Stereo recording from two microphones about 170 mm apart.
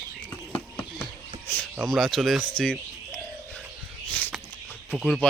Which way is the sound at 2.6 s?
5° left (ahead or behind).